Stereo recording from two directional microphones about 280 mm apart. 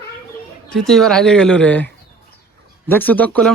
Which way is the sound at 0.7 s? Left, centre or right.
Centre.